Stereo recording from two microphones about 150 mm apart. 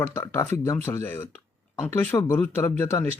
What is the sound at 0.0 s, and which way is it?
A man's voice, 20° left (ahead or behind).